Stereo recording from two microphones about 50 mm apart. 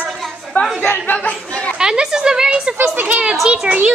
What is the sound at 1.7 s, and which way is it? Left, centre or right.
A woman's voice, centre.